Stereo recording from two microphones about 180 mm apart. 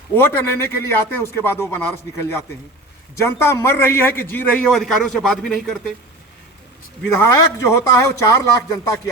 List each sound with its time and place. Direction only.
0.2 s a man's voice: 10° left (ahead or behind)
7.2 s a man's voice: 15° left (ahead or behind)